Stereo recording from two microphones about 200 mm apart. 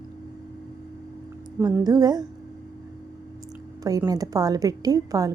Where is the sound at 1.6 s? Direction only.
15° right (ahead or behind).